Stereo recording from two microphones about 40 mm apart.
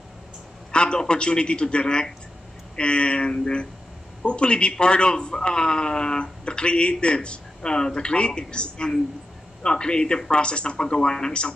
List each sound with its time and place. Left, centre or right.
0.7 s a man's voice: left